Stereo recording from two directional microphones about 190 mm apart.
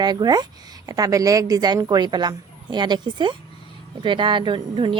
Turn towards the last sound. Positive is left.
turn(degrees=-25)  # may be behind; listen again after turning